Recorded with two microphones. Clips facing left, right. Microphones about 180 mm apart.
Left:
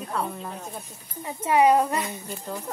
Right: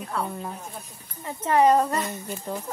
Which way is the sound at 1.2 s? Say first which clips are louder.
Even; 10° left (ahead or behind).